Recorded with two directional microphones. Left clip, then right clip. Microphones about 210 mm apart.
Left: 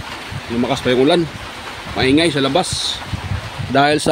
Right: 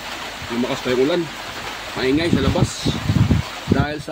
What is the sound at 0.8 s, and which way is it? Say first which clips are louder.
Speech: left 5 dB; 55° left (ahead or behind).